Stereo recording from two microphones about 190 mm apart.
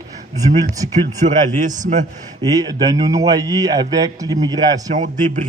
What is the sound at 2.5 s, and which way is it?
A man's voice, 20° right (ahead or behind).